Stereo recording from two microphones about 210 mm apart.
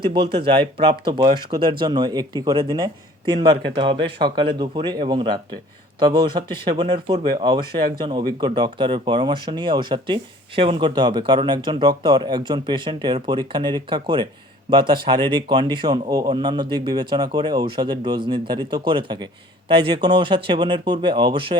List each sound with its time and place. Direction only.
0.0 s speech: 25° right (ahead or behind)